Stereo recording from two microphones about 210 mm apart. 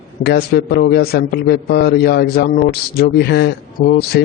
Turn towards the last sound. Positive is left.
turn(degrees=50)  # may be behind; listen again after turning